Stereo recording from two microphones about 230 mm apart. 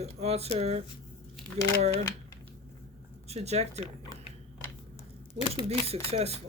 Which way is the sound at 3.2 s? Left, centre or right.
Right.